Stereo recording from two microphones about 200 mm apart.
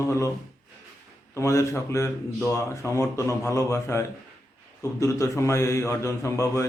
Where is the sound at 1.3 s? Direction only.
15° left (ahead or behind).